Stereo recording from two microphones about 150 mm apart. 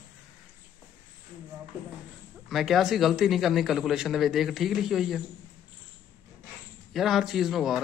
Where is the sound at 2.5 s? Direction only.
Centre (ahead or behind).